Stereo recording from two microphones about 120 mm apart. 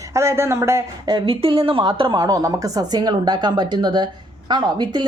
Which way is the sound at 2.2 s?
30° right (ahead or behind).